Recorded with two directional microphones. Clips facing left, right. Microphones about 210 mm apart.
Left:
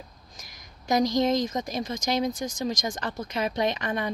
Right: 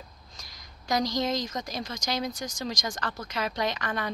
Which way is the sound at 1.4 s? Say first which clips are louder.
Left 5 dB; 25° left (ahead or behind).